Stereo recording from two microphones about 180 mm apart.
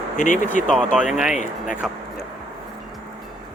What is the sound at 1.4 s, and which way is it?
Speech, 45° left (ahead or behind).